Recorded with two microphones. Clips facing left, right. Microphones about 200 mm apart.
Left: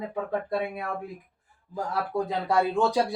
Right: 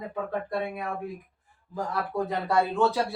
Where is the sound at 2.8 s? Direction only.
15° left (ahead or behind).